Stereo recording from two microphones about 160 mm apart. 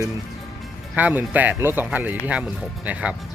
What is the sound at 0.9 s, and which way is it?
Speech, 10° right (ahead or behind).